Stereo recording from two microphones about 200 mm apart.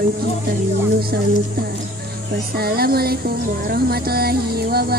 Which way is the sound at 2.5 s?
50° right (ahead or behind).